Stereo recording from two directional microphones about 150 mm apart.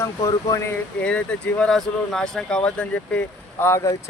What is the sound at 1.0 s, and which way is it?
Speech, 5° left (ahead or behind).